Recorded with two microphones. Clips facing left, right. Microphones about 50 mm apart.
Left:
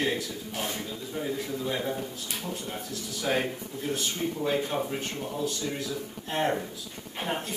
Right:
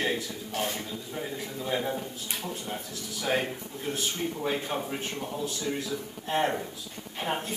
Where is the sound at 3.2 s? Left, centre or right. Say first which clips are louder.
Even; centre.